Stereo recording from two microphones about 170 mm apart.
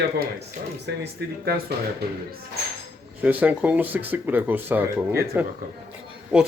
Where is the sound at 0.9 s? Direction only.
75° right (ahead or behind).